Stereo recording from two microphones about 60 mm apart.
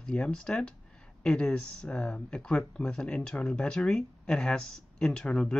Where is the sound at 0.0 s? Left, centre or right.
Centre.